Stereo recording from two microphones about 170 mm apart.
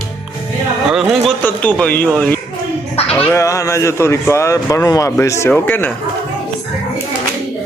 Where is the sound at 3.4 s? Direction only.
20° left (ahead or behind).